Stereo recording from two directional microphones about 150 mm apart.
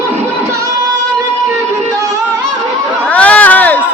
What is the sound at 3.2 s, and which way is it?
Crowd, 10° left (ahead or behind).